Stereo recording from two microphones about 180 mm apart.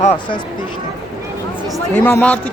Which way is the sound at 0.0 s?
35° left (ahead or behind).